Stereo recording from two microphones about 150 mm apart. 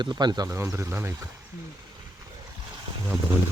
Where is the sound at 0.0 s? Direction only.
30° right (ahead or behind).